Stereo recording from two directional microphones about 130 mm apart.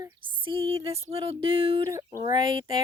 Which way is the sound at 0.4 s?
45° right (ahead or behind).